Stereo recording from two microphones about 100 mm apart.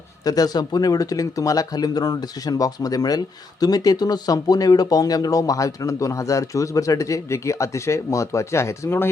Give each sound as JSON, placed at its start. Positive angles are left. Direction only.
{"t": 0.3, "sound": "speech", "side_deg": 40}